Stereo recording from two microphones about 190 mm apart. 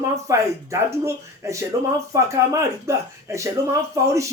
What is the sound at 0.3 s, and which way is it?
Speech, 15° right (ahead or behind).